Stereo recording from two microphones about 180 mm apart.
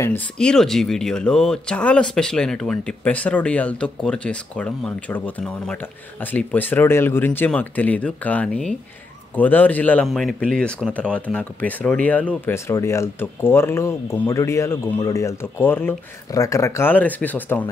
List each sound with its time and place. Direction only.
0.0 s speech: 10° left (ahead or behind)